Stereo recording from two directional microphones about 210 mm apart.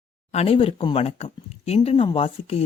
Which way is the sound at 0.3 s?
30° left (ahead or behind).